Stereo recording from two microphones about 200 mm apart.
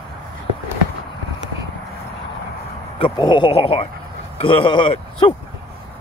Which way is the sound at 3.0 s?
25° left (ahead or behind).